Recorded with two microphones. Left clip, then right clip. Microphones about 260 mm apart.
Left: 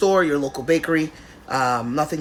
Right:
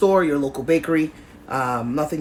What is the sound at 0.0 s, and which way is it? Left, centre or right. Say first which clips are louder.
A man's voice: even; centre.